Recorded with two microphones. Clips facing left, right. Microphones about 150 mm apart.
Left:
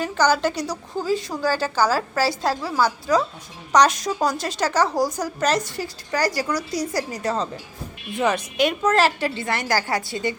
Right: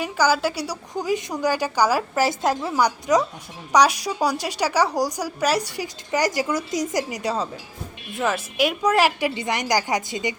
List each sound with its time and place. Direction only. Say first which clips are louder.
0.0 s a woman's voice: left 1 dB; 10° right (ahead or behind)
8.1 s a woman's voice: left 2 dB; centre (ahead or behind); by 10.3 s 15° right (ahead or behind)